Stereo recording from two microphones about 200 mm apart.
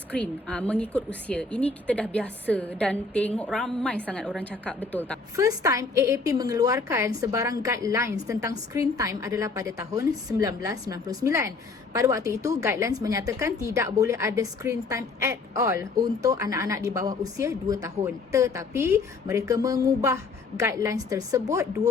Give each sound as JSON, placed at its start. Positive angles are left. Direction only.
{"t": 0.1, "sound": "a woman's voice", "side_deg": 5}
{"t": 5.4, "sound": "a woman's voice", "side_deg": -15}